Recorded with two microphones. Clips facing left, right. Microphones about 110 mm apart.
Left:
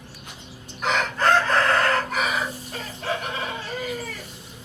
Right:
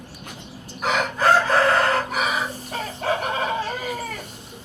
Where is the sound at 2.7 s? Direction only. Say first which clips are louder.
Right 5 dB; 50° right (ahead or behind).